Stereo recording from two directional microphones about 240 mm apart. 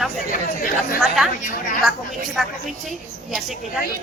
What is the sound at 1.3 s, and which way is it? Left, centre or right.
Speech, left.